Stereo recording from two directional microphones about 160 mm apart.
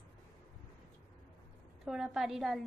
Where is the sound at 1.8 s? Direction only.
5° right (ahead or behind).